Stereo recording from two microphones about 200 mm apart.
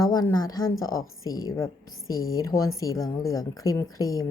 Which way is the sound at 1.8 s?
90° left.